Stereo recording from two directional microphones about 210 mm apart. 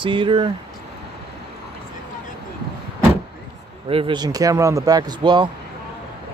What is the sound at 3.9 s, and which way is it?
Speech, 25° right (ahead or behind).